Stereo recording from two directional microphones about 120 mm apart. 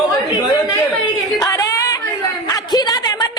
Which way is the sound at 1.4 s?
30° left (ahead or behind).